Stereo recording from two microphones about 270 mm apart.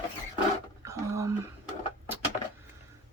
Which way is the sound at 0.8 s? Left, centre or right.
Centre.